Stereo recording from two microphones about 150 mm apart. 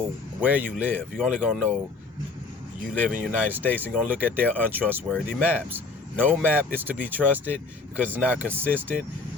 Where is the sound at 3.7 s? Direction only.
10° right (ahead or behind).